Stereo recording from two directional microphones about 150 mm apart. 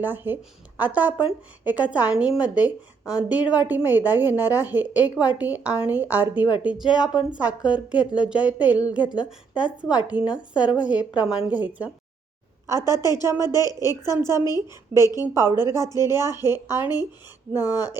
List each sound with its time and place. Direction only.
0.0 s a woman's voice: 15° right (ahead or behind)
12.8 s a woman's voice: 25° left (ahead or behind)
13.2 s a woman's voice: 20° right (ahead or behind)
13.5 s a woman's voice: 25° left (ahead or behind)
15.3 s a woman's voice: 15° right (ahead or behind)
15.5 s a woman's voice: 25° left (ahead or behind)
15.9 s a woman's voice: 20° right (ahead or behind)